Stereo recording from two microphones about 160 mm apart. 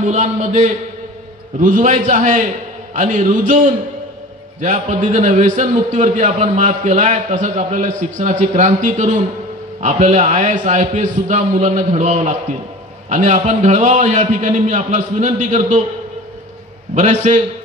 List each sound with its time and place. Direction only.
0.0 s a man's voice: 45° right (ahead or behind)
16.9 s a man's voice: 50° right (ahead or behind)